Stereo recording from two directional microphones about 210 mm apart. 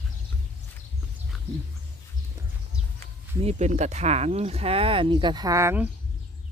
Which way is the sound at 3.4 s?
30° right (ahead or behind).